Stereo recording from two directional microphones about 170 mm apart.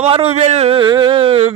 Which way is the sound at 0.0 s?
35° right (ahead or behind).